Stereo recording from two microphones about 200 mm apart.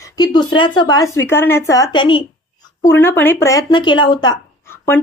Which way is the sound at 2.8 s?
10° left (ahead or behind).